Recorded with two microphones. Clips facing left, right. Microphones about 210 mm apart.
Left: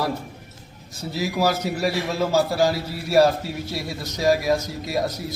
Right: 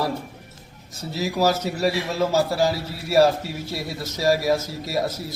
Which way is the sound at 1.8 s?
Centre (ahead or behind).